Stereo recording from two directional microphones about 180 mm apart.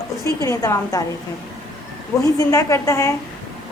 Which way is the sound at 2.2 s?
20° left (ahead or behind).